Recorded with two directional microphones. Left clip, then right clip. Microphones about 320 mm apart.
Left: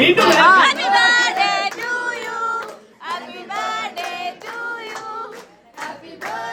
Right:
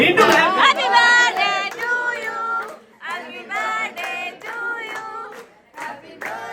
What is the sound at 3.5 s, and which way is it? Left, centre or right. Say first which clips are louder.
Child singing: right 1 dB; centre.